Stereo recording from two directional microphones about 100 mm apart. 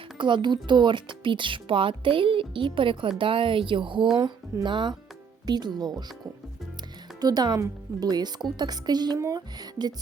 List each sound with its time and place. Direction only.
0.2 s speech: 50° right (ahead or behind)
7.2 s speech: 40° right (ahead or behind)
9.1 s speech: 30° right (ahead or behind)
9.6 s speech: 45° right (ahead or behind)